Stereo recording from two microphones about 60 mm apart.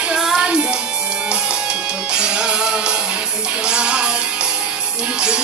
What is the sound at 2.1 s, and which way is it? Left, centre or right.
Music, centre.